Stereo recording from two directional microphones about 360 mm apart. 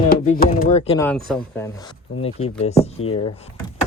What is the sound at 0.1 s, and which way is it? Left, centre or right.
Speech, left.